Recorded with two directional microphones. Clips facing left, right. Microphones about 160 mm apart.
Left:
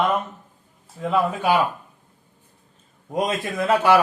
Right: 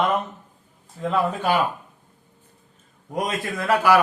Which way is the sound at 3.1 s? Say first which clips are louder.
Left 2 dB; 20° left (ahead or behind).